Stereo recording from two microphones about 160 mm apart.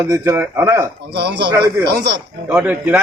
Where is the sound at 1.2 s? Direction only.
85° right.